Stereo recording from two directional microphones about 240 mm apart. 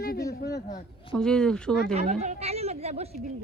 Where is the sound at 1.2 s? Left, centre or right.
Centre.